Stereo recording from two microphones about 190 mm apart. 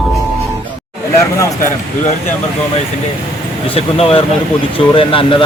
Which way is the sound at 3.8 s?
30° left (ahead or behind).